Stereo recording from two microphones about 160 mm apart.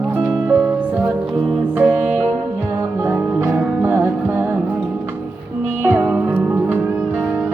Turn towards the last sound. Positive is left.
turn(degrees=-10)  # may be behind; listen again after turning